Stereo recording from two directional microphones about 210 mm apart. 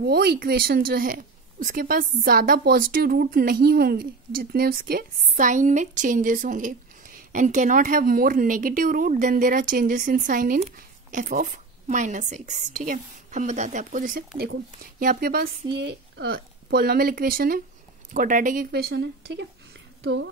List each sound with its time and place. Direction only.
0.0 s a woman's voice: 50° right (ahead or behind)